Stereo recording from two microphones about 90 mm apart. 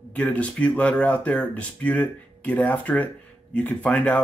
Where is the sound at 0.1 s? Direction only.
15° left (ahead or behind).